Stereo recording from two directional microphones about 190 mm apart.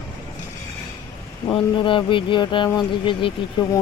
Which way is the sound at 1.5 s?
25° left (ahead or behind).